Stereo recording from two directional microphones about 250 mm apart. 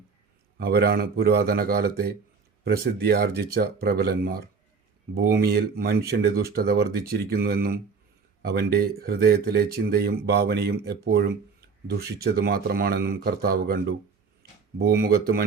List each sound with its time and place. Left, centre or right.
0.6 s speech: right